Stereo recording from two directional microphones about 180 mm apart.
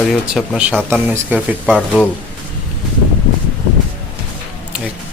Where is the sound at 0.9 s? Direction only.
10° right (ahead or behind).